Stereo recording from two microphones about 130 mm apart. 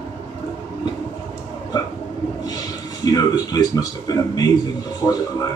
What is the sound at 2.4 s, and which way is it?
A man's voice, 30° left (ahead or behind).